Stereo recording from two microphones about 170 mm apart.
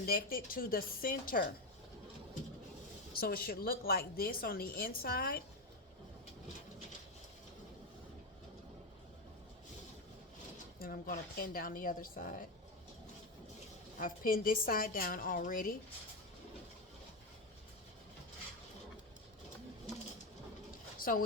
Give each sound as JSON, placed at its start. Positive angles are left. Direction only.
{"t": 0.0, "sound": "a woman's voice", "side_deg": 60}
{"t": 3.1, "sound": "a woman's voice", "side_deg": 65}
{"t": 10.8, "sound": "a woman's voice", "side_deg": 55}
{"t": 14.0, "sound": "a woman's voice", "side_deg": 55}
{"t": 21.0, "sound": "speech", "side_deg": 55}